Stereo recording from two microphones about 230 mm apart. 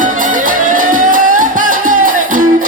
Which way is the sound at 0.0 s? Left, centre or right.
Right.